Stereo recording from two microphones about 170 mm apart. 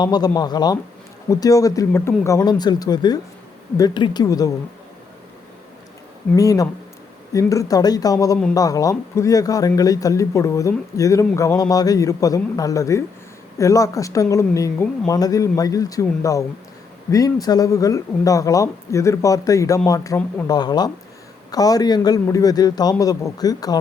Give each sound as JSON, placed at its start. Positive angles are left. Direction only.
{"t": 0.0, "sound": "speech", "side_deg": 25}
{"t": 6.3, "sound": "speech", "side_deg": 20}